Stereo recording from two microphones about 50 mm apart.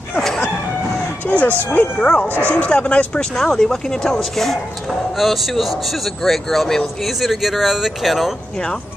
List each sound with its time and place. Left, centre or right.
1.2 s speech: left
3.2 s a man's voice: centre